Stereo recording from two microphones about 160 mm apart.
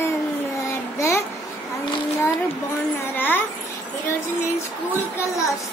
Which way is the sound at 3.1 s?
10° left (ahead or behind).